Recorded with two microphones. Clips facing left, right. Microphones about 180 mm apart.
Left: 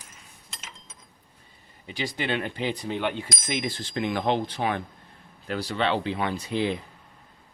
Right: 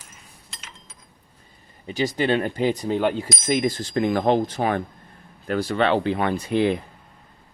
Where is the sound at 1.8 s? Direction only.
40° right (ahead or behind).